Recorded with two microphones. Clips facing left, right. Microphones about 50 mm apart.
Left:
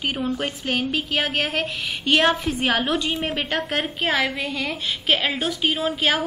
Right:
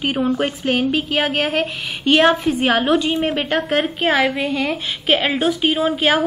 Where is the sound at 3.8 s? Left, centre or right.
Centre.